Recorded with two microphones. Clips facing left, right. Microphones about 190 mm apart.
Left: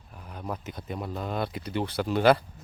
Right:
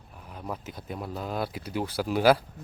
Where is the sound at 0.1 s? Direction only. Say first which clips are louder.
Left 1 dB; centre (ahead or behind).